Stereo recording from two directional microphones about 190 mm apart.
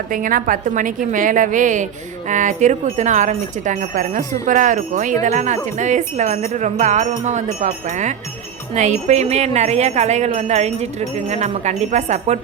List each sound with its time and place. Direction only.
0.1 s a woman's voice: 45° right (ahead or behind)